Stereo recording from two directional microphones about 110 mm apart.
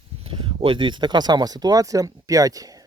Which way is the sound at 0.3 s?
55° right (ahead or behind).